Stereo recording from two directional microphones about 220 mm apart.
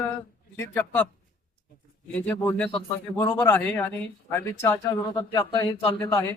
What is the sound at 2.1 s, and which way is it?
Speech, 5° left (ahead or behind).